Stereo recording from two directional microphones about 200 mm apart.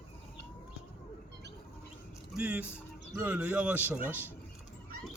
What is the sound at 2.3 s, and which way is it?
Speech, 5° right (ahead or behind).